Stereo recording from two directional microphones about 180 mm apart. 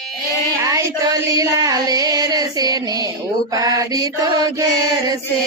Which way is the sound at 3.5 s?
20° right (ahead or behind).